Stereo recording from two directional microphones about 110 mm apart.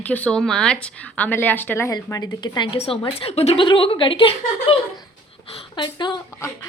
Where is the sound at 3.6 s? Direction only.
50° left (ahead or behind).